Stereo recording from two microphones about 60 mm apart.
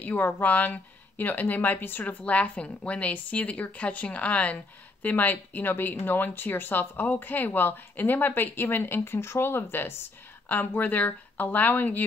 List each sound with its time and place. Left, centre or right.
0.0 s speech: left
2.2 s speech: left